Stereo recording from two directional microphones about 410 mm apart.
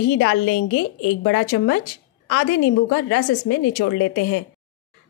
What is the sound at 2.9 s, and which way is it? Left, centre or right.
A woman's voice, left.